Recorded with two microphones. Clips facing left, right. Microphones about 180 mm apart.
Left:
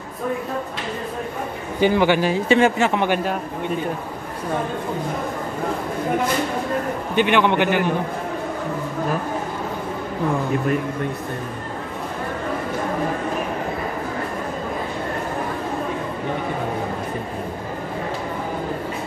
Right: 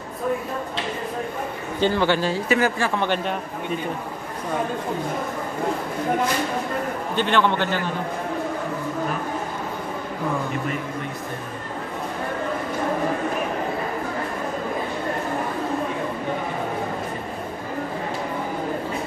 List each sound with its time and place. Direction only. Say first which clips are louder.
1.8 s a man's voice: left 3 dB; 15° left (ahead or behind)
2.4 s speech: left 7 dB; 25° left (ahead or behind)
3.0 s a man's voice: left 3 dB; 10° left (ahead or behind)
7.2 s a man's voice: left 3 dB; 15° left (ahead or behind)